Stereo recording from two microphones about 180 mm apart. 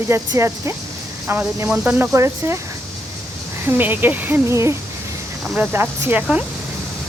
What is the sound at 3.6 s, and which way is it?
Speech, 10° right (ahead or behind).